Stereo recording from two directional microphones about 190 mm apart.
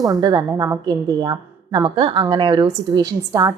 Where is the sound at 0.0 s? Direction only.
20° right (ahead or behind).